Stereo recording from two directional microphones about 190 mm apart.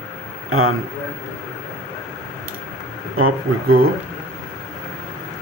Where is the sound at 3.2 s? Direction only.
90° right.